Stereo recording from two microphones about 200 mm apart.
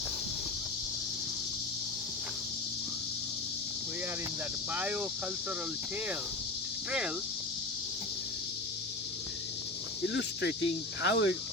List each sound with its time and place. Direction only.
4.7 s speech: 10° right (ahead or behind)
10.1 s speech: 55° left (ahead or behind)